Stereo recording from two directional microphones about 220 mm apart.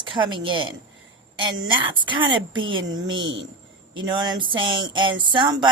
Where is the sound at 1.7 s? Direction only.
20° right (ahead or behind).